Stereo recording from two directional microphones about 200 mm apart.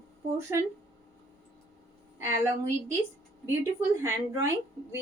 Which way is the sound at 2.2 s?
15° right (ahead or behind).